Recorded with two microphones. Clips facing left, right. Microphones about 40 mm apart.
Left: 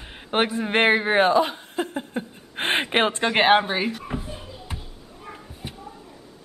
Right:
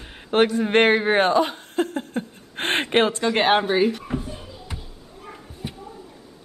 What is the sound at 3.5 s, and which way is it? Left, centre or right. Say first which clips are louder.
Bouncing: right 1 dB; centre.